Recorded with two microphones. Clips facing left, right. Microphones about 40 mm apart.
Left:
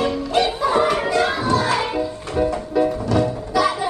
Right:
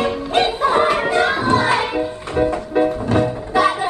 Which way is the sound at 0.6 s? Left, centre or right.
Right.